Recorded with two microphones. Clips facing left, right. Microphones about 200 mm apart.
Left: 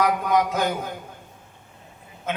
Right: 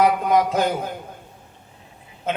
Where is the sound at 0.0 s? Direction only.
30° right (ahead or behind).